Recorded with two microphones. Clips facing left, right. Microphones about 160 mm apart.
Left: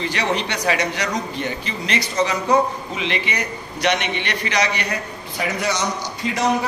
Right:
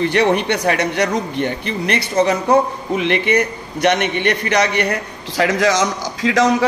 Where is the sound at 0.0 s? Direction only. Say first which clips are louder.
Right 7 dB; 55° right (ahead or behind).